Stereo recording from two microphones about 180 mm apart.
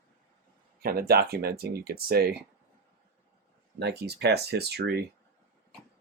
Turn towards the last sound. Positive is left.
turn(degrees=-65)  # may be behind; listen again after turning